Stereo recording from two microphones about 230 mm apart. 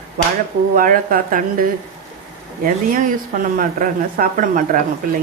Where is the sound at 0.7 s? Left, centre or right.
Right.